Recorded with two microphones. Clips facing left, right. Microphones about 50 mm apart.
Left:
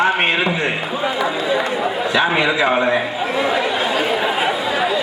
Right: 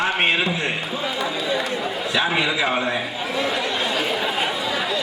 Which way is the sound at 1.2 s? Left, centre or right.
Centre.